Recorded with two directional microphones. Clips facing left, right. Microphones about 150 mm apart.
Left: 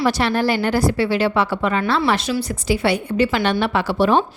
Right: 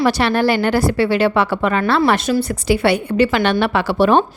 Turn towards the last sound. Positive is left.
turn(degrees=-65)  # may be behind; listen again after turning